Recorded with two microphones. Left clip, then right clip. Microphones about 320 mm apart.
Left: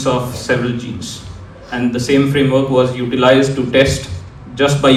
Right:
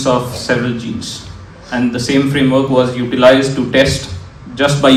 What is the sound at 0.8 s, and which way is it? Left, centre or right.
Speech, left.